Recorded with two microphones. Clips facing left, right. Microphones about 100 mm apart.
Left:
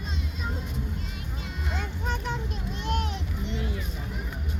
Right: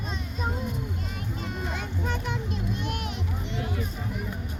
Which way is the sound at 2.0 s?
25° left (ahead or behind).